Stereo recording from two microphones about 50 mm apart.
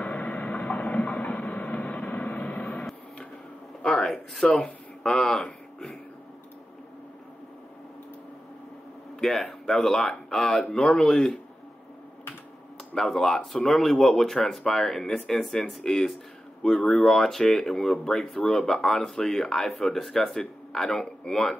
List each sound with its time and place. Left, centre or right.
0.0 s train: left
3.8 s a sound: centre
4.4 s speech: centre
9.2 s speech: centre
12.9 s speech: centre